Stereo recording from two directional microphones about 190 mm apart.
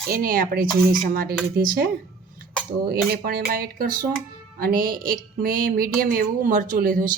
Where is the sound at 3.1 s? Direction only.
50° right (ahead or behind).